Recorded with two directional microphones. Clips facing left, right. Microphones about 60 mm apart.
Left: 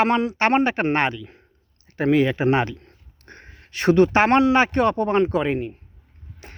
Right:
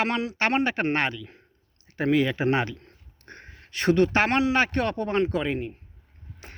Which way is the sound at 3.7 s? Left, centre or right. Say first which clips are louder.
Left 5 dB; left.